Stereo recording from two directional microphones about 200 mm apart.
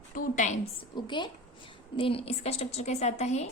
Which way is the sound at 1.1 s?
25° left (ahead or behind).